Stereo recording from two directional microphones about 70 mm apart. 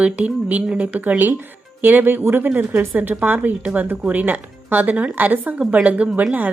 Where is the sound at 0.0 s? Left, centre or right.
Centre.